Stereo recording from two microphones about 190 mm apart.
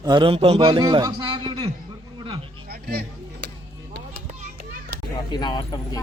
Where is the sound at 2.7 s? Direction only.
55° right (ahead or behind).